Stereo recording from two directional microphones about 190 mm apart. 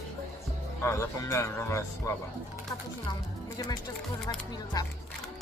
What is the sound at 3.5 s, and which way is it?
Speech, 20° left (ahead or behind).